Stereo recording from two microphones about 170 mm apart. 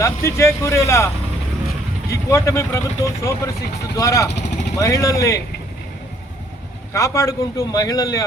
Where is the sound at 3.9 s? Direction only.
20° left (ahead or behind).